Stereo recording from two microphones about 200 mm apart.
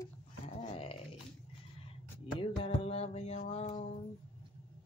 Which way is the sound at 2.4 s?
30° left (ahead or behind).